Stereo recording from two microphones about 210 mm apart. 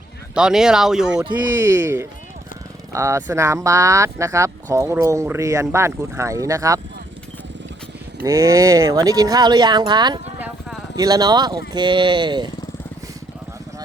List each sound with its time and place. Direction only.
0.3 s speech: 5° right (ahead or behind)
8.2 s speech: 15° right (ahead or behind)